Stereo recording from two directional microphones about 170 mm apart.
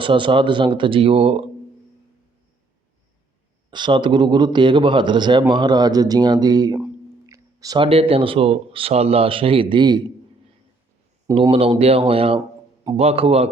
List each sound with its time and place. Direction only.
0.0 s speech: 30° right (ahead or behind)
3.7 s a man's voice: 25° right (ahead or behind)
6.7 s a sound: 15° right (ahead or behind)
7.9 s speech: 35° right (ahead or behind)
11.3 s speech: 35° right (ahead or behind)